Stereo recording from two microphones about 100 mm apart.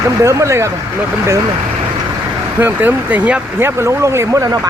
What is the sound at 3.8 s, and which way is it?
Speech, 30° right (ahead or behind).